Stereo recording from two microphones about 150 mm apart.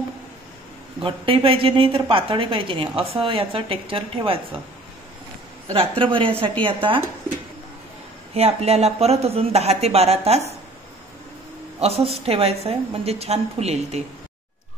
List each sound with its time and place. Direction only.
1.0 s a woman's voice: 35° right (ahead or behind)
5.7 s a woman's voice: 35° right (ahead or behind)
8.4 s speech: 45° right (ahead or behind)
11.8 s speech: 45° right (ahead or behind)